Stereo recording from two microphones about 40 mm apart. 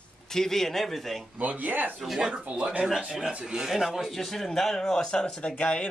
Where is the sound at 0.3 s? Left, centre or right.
Centre.